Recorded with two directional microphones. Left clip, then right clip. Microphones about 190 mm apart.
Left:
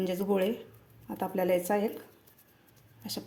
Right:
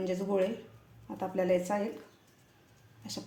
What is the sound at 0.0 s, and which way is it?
Speech, 40° left (ahead or behind).